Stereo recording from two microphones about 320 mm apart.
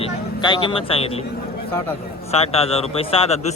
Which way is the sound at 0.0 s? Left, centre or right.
Centre.